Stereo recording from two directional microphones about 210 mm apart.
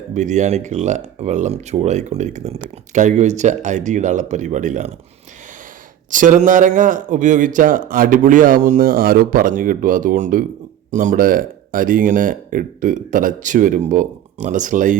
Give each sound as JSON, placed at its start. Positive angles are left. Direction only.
{"t": 0.1, "sound": "speech", "side_deg": -35}
{"t": 6.1, "sound": "speech", "side_deg": -40}